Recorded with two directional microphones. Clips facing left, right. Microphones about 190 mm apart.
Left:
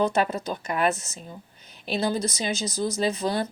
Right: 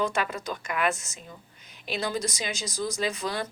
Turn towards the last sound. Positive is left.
turn(degrees=30)  # may be behind; listen again after turning